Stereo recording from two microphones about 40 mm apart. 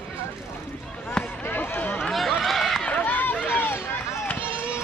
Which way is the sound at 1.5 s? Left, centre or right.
Left.